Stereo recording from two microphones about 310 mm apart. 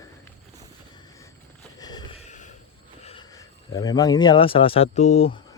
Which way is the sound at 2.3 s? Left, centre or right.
Left.